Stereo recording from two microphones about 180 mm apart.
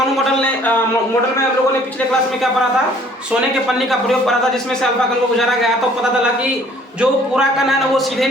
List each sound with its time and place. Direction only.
7.0 s a man's voice: centre (ahead or behind)